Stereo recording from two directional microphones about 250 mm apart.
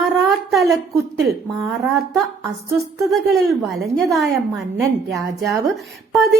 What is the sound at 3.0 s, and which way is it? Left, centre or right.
A woman's voice, centre.